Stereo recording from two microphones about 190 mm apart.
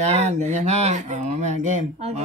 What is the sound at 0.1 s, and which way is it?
Speech, 35° right (ahead or behind).